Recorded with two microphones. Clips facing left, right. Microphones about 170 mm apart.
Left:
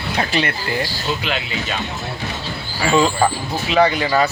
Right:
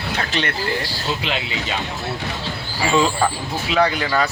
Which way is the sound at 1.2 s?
25° right (ahead or behind).